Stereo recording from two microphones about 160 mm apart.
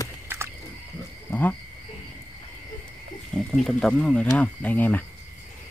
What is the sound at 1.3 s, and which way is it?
Wild animals, 10° left (ahead or behind).